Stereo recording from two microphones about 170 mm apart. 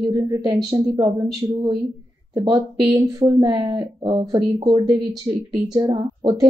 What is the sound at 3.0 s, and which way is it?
Speech, 25° right (ahead or behind).